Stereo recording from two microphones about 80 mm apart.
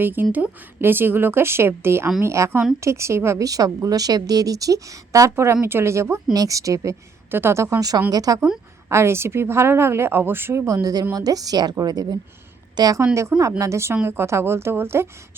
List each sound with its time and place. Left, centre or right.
0.0 s a woman's voice: right
6.3 s a woman's voice: right
7.3 s speech: right
8.1 s a woman's voice: right
8.9 s speech: right
10.7 s a woman's voice: right
13.6 s speech: right